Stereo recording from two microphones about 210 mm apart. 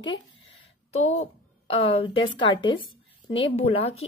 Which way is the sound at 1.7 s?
25° left (ahead or behind).